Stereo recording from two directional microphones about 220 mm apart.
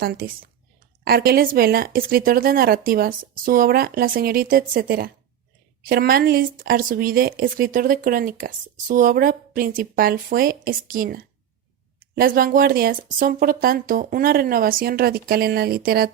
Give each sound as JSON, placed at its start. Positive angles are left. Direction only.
{"t": 0.0, "sound": "speech", "side_deg": -40}